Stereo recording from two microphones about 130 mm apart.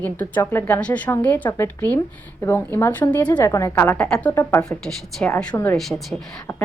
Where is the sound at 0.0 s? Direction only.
15° left (ahead or behind).